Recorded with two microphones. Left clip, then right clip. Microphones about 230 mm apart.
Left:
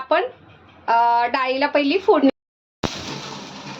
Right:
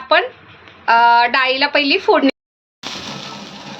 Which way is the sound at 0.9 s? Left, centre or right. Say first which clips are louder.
Right 6 dB; centre.